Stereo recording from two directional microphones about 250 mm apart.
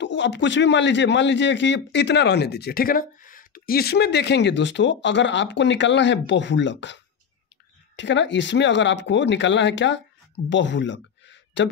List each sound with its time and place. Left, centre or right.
0.0 s a man's voice: left